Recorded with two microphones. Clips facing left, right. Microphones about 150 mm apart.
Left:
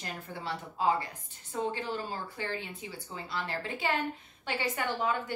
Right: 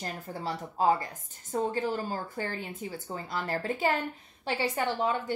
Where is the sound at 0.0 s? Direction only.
40° right (ahead or behind).